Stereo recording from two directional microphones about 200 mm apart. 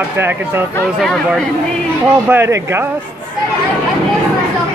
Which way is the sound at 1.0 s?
Centre (ahead or behind).